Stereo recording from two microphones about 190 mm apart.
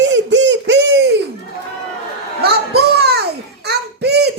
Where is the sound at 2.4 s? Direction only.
60° right (ahead or behind).